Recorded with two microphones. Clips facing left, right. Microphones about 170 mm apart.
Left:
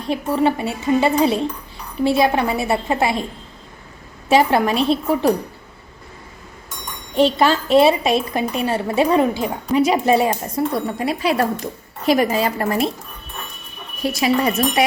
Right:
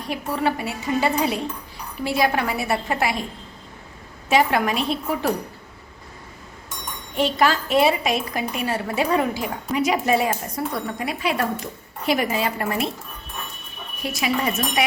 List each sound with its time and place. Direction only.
0.1 s a woman's voice: 25° left (ahead or behind)
4.3 s a woman's voice: 30° left (ahead or behind)
7.2 s a woman's voice: 30° left (ahead or behind)
14.0 s speech: 35° left (ahead or behind)